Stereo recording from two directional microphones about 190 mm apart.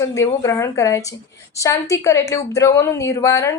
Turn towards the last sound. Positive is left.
turn(degrees=15)  # may be behind; listen again after turning